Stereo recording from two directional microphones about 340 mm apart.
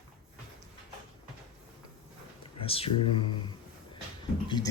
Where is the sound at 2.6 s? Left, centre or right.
Centre.